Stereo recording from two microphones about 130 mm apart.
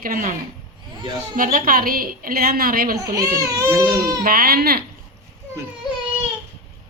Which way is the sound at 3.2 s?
25° right (ahead or behind).